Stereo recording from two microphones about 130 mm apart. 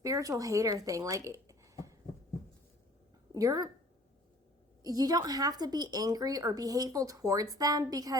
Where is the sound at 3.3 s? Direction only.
30° right (ahead or behind).